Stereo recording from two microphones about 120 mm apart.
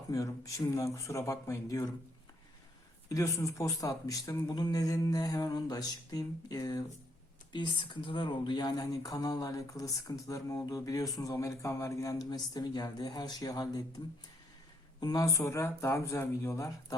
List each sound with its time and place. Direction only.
0.1 s speech: 30° left (ahead or behind)
3.1 s a man's voice: 25° left (ahead or behind)
7.5 s a man's voice: 40° left (ahead or behind)
15.0 s speech: 30° left (ahead or behind)